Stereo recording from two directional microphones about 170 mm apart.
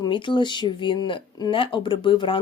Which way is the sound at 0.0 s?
30° left (ahead or behind).